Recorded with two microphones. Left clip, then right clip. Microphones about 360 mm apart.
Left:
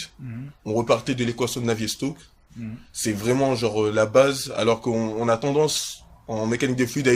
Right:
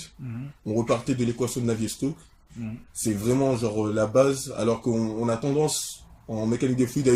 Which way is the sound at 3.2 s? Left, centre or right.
Left.